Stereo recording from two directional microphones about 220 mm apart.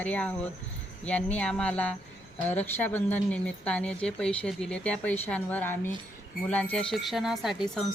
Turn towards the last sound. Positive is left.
turn(degrees=0)  # may be behind; listen again after turning